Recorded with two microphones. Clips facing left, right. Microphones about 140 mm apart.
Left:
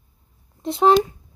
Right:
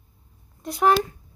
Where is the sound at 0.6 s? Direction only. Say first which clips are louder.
Left 4 dB; 25° left (ahead or behind).